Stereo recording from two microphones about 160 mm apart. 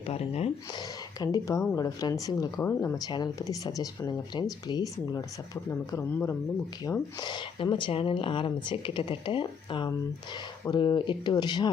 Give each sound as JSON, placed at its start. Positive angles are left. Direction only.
{"t": 0.1, "sound": "speech", "side_deg": 40}
{"t": 1.2, "sound": "speech", "side_deg": 20}
{"t": 2.6, "sound": "speech", "side_deg": 15}
{"t": 3.1, "sound": "speech", "side_deg": 25}